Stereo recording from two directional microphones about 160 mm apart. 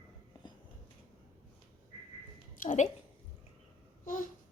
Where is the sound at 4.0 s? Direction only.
55° left (ahead or behind).